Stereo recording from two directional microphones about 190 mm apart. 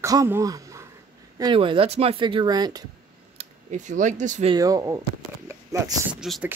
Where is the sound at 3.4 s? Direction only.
40° right (ahead or behind).